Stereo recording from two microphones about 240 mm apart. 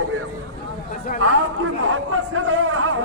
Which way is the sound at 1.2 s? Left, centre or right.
Right.